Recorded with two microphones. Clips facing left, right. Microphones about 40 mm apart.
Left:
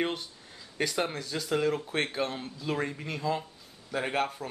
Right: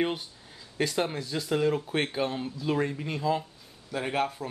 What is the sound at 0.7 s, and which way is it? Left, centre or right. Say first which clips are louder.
Speech: right 2 dB; centre.